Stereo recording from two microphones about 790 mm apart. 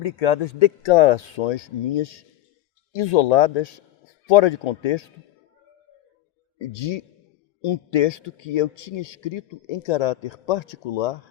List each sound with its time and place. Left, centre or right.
0.0 s speech: left
7.6 s speech: left